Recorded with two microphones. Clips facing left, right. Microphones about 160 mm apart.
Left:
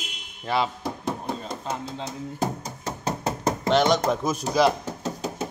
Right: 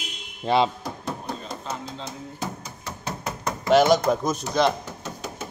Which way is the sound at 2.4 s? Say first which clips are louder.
Left 6 dB; 40° left (ahead or behind).